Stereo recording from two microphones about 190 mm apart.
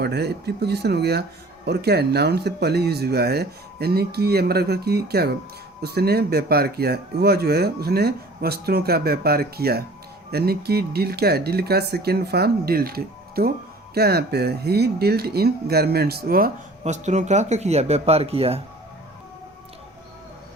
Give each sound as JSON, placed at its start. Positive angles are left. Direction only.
{"t": 0.0, "sound": "speech", "side_deg": -60}
{"t": 16.8, "sound": "speech", "side_deg": -35}